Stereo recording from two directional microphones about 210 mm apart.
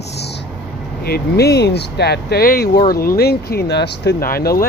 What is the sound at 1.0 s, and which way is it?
Speech, 50° left (ahead or behind).